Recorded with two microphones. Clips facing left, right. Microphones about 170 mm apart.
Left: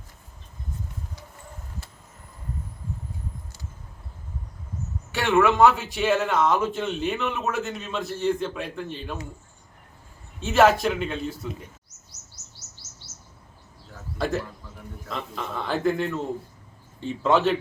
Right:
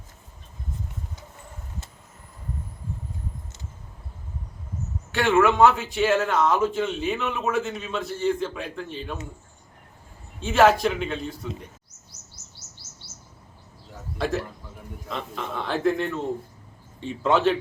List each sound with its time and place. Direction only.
5.1 s speech: centre (ahead or behind)
10.4 s speech: centre (ahead or behind)
15.1 s speech: centre (ahead or behind)